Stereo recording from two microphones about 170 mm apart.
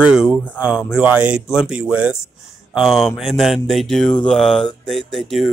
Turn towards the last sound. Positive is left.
turn(degrees=0)  # may be behind; listen again after turning